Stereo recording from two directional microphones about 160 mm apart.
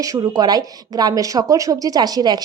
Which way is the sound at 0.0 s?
25° right (ahead or behind).